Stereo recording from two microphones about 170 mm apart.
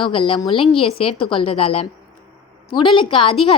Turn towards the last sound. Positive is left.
turn(degrees=30)  # may be behind; listen again after turning